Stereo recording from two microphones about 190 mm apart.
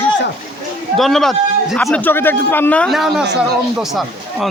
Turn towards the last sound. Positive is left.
turn(degrees=0)  # may be behind; listen again after turning